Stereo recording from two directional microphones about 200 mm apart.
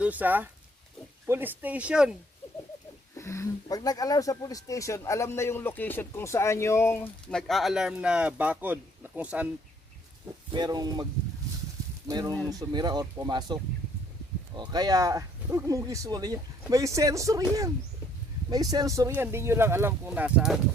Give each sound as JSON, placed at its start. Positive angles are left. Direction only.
{"t": 0.0, "sound": "speech", "side_deg": -10}
{"t": 3.2, "sound": "speech", "side_deg": 15}
{"t": 10.5, "sound": "speech", "side_deg": -20}
{"t": 12.0, "sound": "speech", "side_deg": -15}
{"t": 18.5, "sound": "speech", "side_deg": -20}